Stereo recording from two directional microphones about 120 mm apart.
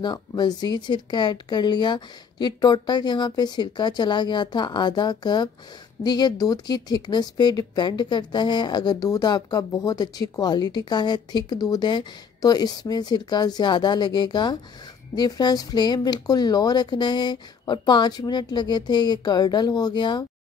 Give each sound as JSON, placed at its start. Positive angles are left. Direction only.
{"t": 0.0, "sound": "speech", "side_deg": 35}